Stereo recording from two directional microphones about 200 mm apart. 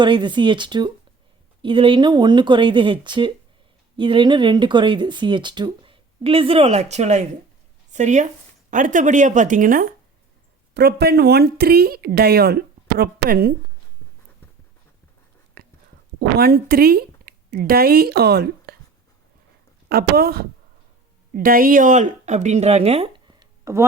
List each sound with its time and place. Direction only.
0.0 s a woman's voice: 25° right (ahead or behind); by 9.9 s 45° right (ahead or behind)
10.8 s speech: 55° right (ahead or behind)
15.6 s whispering: 50° right (ahead or behind)
16.4 s speech: 50° right (ahead or behind)
19.9 s speech: 50° right (ahead or behind); by 23.8 s 20° right (ahead or behind)